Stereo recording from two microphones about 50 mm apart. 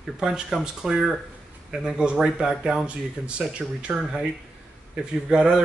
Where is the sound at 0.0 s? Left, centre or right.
Centre.